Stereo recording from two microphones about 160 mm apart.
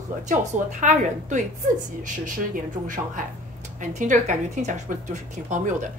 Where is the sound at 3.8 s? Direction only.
50° right (ahead or behind).